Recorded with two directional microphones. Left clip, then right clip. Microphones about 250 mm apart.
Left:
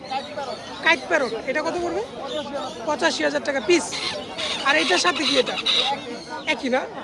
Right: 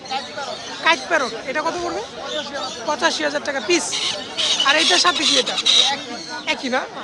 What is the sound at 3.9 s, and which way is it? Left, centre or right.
Speech, centre.